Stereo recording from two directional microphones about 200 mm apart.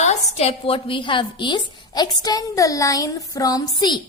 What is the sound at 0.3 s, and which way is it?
A woman's voice, 30° left (ahead or behind).